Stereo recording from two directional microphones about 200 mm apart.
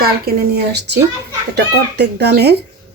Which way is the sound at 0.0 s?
50° right (ahead or behind).